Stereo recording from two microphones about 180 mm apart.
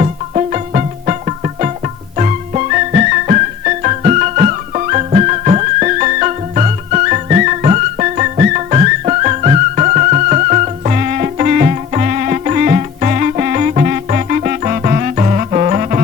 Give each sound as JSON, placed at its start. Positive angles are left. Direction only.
{"t": 0.0, "sound": "music", "side_deg": -40}
{"t": 2.1, "sound": "music", "side_deg": -40}